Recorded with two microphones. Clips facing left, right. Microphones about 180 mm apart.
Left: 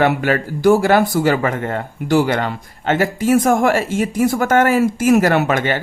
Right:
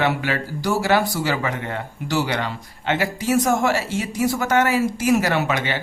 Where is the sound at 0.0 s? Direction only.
50° left (ahead or behind).